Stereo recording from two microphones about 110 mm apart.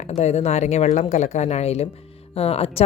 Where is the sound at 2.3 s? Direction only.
65° left (ahead or behind).